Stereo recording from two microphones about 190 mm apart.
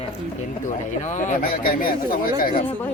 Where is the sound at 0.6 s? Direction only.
40° left (ahead or behind).